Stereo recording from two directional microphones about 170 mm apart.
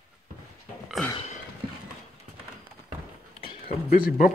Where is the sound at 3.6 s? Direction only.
55° left (ahead or behind).